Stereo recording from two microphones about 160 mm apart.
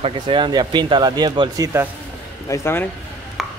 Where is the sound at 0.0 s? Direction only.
30° right (ahead or behind).